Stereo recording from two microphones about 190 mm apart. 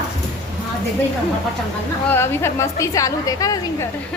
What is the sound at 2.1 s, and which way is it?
A woman's voice, 10° left (ahead or behind).